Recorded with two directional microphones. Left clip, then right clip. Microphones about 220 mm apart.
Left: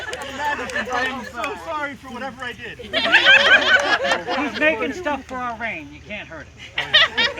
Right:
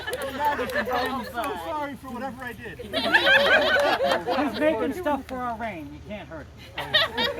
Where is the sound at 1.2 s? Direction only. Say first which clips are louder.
Left 1 dB; 35° left (ahead or behind).